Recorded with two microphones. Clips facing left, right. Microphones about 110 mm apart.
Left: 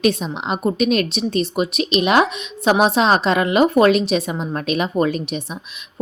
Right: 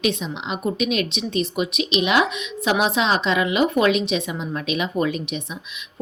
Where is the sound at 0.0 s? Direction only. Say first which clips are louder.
Left 5 dB; 40° left (ahead or behind).